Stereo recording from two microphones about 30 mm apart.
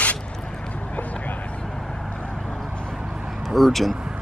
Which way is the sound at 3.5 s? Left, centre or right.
Centre.